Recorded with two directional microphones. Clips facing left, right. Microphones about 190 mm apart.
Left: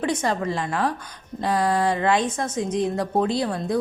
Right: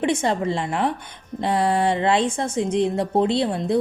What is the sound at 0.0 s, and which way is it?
A woman's voice, 25° right (ahead or behind).